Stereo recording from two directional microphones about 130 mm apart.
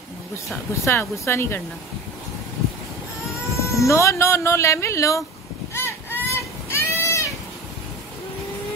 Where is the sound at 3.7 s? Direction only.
25° left (ahead or behind).